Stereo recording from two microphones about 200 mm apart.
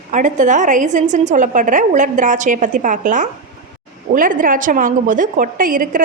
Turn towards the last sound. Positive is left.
turn(degrees=-45)  # may be behind; listen again after turning